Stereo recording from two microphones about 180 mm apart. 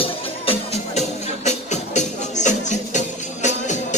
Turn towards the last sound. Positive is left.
turn(degrees=40)  # may be behind; listen again after turning